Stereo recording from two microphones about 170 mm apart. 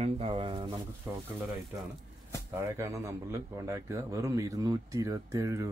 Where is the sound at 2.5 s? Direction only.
15° right (ahead or behind).